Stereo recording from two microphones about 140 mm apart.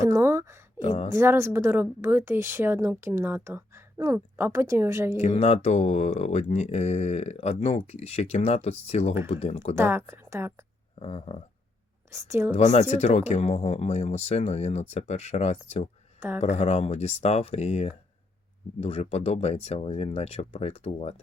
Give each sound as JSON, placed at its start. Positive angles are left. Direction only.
{"t": 0.0, "sound": "speech", "side_deg": -20}
{"t": 0.8, "sound": "speech", "side_deg": 55}
{"t": 1.1, "sound": "a woman's voice", "side_deg": -20}
{"t": 5.1, "sound": "speech", "side_deg": 50}
{"t": 9.7, "sound": "a woman's voice", "side_deg": -15}
{"t": 11.0, "sound": "speech", "side_deg": 50}
{"t": 12.1, "sound": "a woman's voice", "side_deg": -20}
{"t": 12.5, "sound": "speech", "side_deg": 55}